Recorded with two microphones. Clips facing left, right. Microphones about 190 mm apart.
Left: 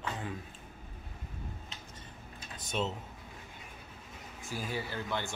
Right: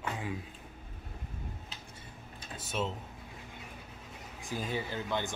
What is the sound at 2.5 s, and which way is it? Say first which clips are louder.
Speech: even; 5° right (ahead or behind).